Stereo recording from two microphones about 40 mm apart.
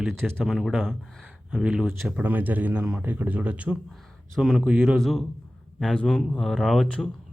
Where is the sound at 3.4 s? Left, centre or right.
Right.